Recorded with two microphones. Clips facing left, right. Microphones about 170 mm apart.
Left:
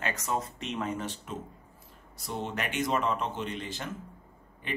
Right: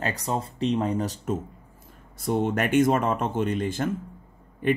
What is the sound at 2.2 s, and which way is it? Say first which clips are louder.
Speech: right 10 dB; 50° right (ahead or behind).